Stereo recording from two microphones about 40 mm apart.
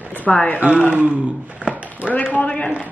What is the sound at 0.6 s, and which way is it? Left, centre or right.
Speech, right.